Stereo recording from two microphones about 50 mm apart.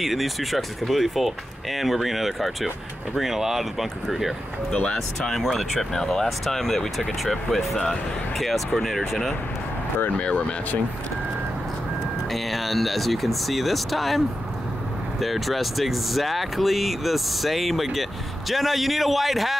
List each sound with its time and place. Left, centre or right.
0.0 s speech: centre
4.9 s speech: centre
7.7 s speech: centre
8.4 s speech: centre
10.1 s speech: left
12.3 s speech: centre